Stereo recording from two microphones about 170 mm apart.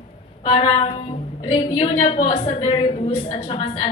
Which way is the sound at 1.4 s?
30° left (ahead or behind).